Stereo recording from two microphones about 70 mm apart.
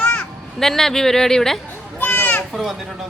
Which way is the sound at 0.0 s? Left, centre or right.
Centre.